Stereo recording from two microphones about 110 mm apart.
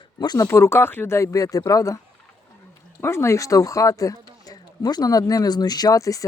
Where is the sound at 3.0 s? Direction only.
25° left (ahead or behind).